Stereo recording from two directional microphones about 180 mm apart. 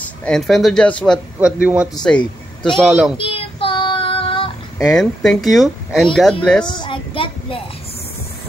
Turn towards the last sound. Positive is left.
turn(degrees=30)  # may be behind; listen again after turning